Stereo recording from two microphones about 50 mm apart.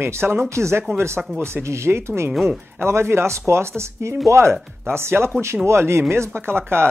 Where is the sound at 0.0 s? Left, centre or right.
Right.